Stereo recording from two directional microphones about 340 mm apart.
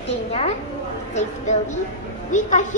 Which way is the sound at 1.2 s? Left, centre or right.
Left.